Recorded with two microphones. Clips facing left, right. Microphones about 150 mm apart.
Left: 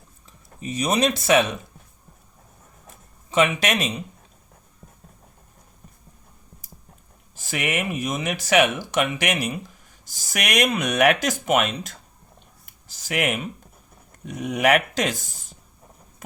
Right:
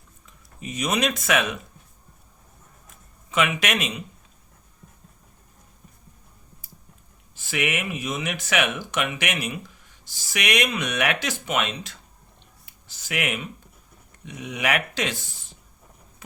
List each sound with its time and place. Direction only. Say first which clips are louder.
0.3 s speech: left 4 dB; 35° left (ahead or behind)
3.2 s speech: left 3 dB; 35° left (ahead or behind)
7.3 s speech: left 1 dB; 40° left (ahead or behind)
12.6 s a sound: left 4 dB; 40° left (ahead or behind)
14.1 s speech: left 6 dB; 45° left (ahead or behind)